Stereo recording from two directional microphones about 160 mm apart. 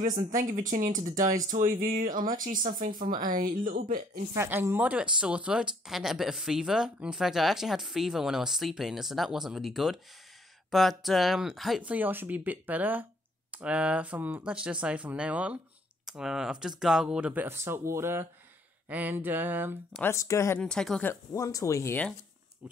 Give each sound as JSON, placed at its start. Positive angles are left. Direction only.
{"t": 0.0, "sound": "speech", "side_deg": -55}
{"t": 4.3, "sound": "speech", "side_deg": -15}
{"t": 19.9, "sound": "speech", "side_deg": 15}
{"t": 20.6, "sound": "speech", "side_deg": 5}
{"t": 21.1, "sound": "speech", "side_deg": 20}